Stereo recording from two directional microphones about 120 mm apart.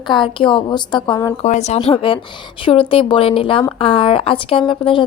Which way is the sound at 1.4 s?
75° left (ahead or behind).